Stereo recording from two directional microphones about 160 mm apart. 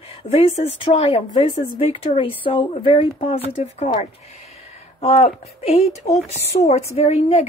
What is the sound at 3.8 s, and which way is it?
A woman's voice, 45° left (ahead or behind).